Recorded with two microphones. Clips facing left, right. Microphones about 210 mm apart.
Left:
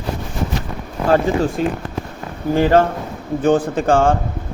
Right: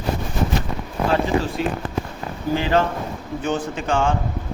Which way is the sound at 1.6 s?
45° left (ahead or behind).